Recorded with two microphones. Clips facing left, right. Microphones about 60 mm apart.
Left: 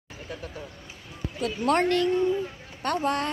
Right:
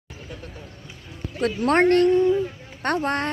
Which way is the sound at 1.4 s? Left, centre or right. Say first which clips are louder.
Right 5 dB; right.